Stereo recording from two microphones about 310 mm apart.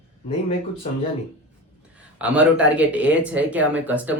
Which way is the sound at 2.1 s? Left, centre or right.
Centre.